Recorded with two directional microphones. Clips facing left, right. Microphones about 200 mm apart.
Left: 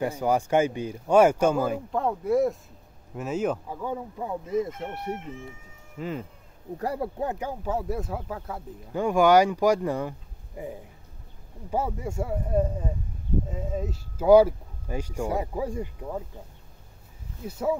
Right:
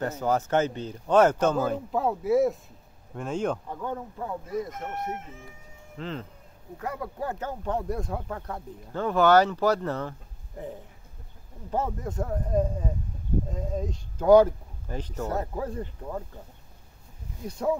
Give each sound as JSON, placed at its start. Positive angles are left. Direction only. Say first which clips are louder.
{"t": 0.0, "sound": "speech", "louder": "left 2 dB", "side_deg": 10}
{"t": 1.9, "sound": "speech", "louder": "even", "side_deg": -5}
{"t": 5.9, "sound": "speech", "louder": "left 3 dB", "side_deg": 10}
{"t": 6.8, "sound": "speech", "louder": "left 5 dB", "side_deg": 35}
{"t": 7.2, "sound": "speech", "louder": "left 2 dB", "side_deg": 15}
{"t": 17.5, "sound": "speech", "louder": "even", "side_deg": 5}